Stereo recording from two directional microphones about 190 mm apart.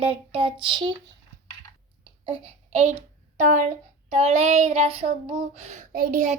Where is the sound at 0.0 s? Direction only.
30° right (ahead or behind).